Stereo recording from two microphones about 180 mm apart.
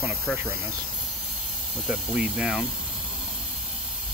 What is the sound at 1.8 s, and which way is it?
Speech, 5° right (ahead or behind).